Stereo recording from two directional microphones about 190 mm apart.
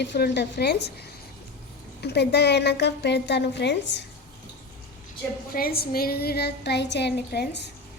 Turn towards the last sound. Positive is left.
turn(degrees=60)  # may be behind; listen again after turning